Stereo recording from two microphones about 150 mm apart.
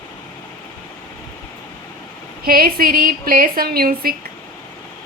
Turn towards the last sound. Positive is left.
turn(degrees=-85)